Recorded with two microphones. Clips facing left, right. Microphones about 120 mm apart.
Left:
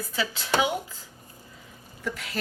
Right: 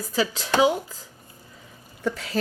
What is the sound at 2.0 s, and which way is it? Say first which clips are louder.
Speech: right 6 dB; 35° right (ahead or behind).